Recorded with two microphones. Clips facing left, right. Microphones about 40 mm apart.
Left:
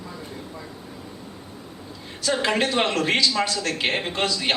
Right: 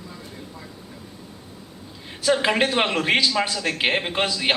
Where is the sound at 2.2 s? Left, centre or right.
Centre.